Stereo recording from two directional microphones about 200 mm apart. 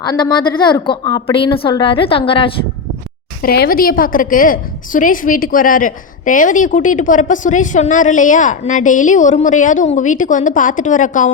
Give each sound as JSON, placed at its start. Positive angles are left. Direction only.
{"t": 0.0, "sound": "a woman's voice", "side_deg": 20}
{"t": 3.4, "sound": "a woman's voice", "side_deg": 50}